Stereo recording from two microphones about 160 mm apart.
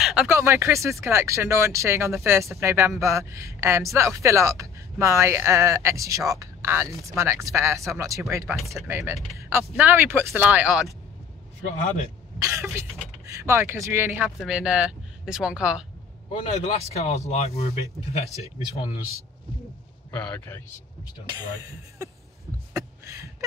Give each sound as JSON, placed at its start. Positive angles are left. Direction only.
{"t": 0.0, "sound": "a sound", "side_deg": -5}
{"t": 0.3, "sound": "speech", "side_deg": -15}
{"t": 12.4, "sound": "speech", "side_deg": -20}
{"t": 16.3, "sound": "speech", "side_deg": 40}
{"t": 20.1, "sound": "a man's voice", "side_deg": 10}
{"t": 22.8, "sound": "a sound", "side_deg": -20}